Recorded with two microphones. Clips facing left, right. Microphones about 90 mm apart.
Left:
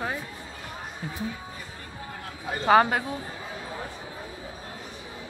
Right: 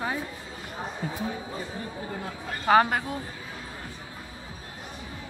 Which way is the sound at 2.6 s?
Centre (ahead or behind).